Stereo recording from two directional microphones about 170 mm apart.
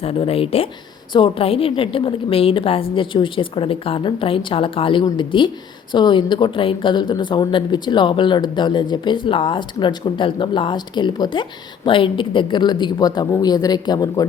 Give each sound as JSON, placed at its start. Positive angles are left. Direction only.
{"t": 0.0, "sound": "a woman's voice", "side_deg": 35}